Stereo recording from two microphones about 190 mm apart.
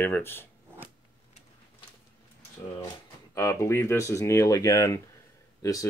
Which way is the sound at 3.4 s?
15° left (ahead or behind).